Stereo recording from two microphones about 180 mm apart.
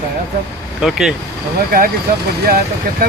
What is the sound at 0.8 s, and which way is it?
Speech, centre (ahead or behind).